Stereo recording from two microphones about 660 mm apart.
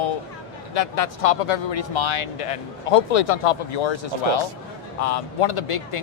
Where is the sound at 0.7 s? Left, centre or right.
Left.